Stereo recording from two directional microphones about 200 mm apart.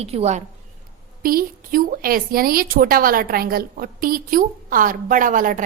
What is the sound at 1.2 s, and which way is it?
A woman's voice, 45° right (ahead or behind).